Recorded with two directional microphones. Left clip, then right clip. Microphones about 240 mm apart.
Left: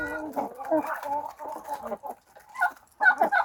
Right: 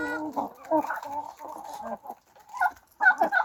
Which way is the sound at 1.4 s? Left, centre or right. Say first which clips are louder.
Left 4 dB; left.